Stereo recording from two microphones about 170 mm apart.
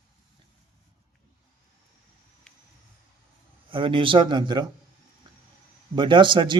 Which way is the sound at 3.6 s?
30° right (ahead or behind).